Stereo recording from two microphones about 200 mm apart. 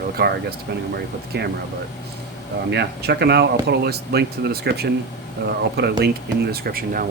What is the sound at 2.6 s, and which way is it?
Speech, 55° right (ahead or behind).